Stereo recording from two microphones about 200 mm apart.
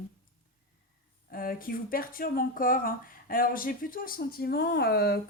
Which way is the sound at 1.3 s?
45° left (ahead or behind).